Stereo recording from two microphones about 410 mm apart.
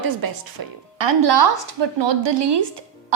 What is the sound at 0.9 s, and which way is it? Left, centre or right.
A woman's voice, right.